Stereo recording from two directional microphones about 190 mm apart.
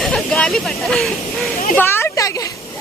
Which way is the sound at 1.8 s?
10° left (ahead or behind).